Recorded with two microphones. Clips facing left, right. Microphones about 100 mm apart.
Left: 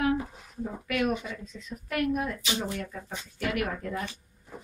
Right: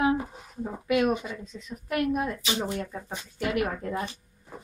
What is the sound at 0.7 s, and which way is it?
Speech, 25° right (ahead or behind).